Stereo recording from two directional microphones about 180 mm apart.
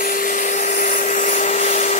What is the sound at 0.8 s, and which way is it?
Vacuum cleaner, 45° left (ahead or behind).